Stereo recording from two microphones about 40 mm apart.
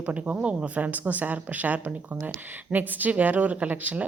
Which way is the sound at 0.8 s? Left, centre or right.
Right.